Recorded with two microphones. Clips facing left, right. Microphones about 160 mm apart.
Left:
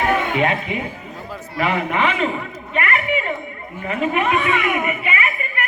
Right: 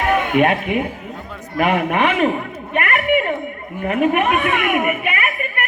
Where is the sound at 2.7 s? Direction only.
60° right (ahead or behind).